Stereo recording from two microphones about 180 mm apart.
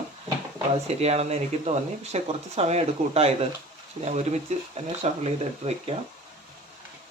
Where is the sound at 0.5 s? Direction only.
35° right (ahead or behind).